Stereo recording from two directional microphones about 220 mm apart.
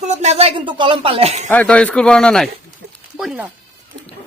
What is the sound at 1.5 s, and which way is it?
Speech, 5° left (ahead or behind).